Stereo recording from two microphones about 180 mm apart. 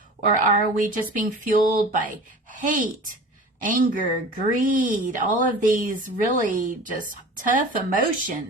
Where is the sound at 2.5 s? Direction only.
45° right (ahead or behind).